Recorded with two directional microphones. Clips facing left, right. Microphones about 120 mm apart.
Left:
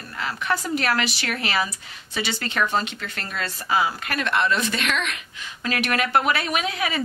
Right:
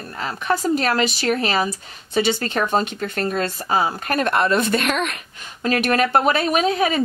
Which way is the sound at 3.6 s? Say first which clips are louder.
Left 2 dB; 30° right (ahead or behind).